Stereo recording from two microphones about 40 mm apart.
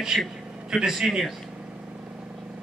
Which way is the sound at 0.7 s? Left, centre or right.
Centre.